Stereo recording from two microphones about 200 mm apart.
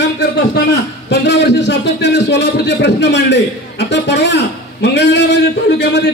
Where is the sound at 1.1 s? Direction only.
60° left (ahead or behind).